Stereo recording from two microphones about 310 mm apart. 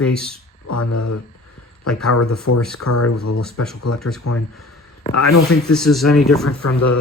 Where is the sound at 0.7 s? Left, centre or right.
Left.